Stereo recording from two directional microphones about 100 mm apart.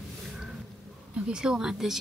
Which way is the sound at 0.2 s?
5° right (ahead or behind).